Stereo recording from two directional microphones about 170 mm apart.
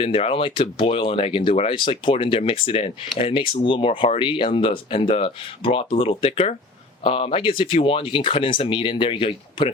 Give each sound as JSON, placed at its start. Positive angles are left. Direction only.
{"t": 0.0, "sound": "speech", "side_deg": 35}